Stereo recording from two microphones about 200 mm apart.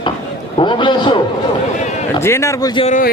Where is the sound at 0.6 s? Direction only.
25° left (ahead or behind).